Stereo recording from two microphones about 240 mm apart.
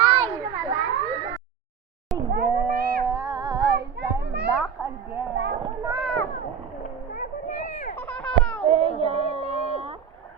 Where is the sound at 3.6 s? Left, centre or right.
Right.